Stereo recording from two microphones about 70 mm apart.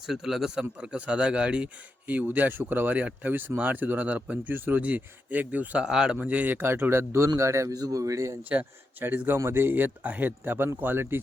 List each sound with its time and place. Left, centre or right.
0.1 s a man's voice: centre
0.6 s a man's voice: centre
5.8 s a man's voice: centre; by 8.4 s right
8.4 s a man's voice: right